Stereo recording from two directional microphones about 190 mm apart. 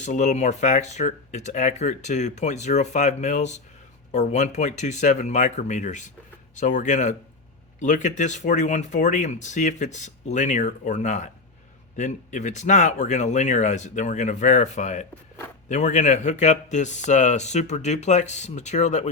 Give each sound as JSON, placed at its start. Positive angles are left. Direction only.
{"t": 0.0, "sound": "speech", "side_deg": 40}